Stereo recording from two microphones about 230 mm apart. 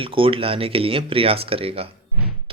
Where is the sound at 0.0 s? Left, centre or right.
Right.